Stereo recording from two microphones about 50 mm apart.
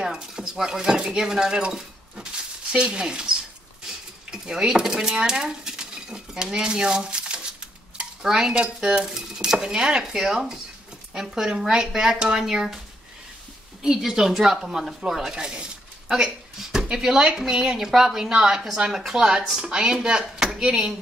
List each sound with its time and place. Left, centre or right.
0.0 s speech: centre
13.8 s speech: centre